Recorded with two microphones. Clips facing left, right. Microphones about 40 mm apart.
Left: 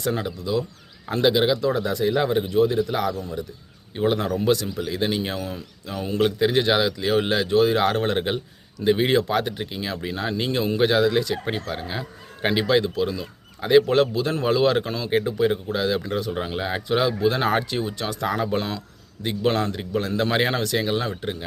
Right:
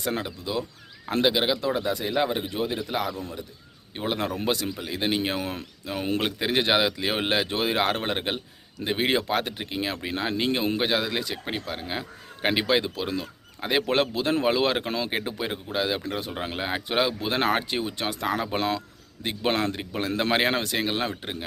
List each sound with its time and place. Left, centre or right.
0.0 s speech: right
5.4 s speech: right
5.8 s speech: right
15.4 s speech: right